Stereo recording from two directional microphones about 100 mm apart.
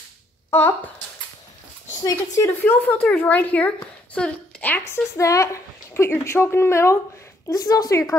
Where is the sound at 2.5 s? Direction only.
20° left (ahead or behind).